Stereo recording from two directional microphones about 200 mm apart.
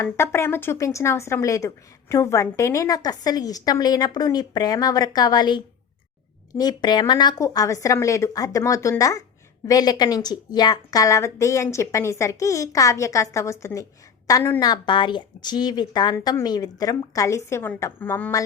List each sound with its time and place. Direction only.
0.0 s speech: 15° left (ahead or behind)